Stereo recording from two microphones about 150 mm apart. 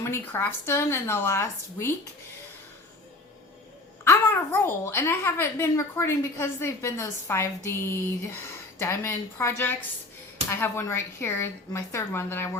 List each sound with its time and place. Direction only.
0.0 s a woman's voice: 15° left (ahead or behind)
4.0 s a woman's voice: 15° left (ahead or behind)